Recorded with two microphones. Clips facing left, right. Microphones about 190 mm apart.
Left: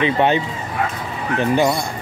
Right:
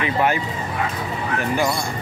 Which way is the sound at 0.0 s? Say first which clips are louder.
Left 4 dB; 25° left (ahead or behind).